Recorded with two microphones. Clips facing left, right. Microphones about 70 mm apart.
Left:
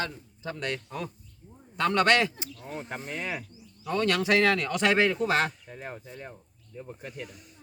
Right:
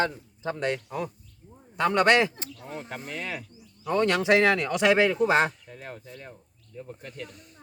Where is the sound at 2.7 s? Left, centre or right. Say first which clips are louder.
Left 1 dB; centre.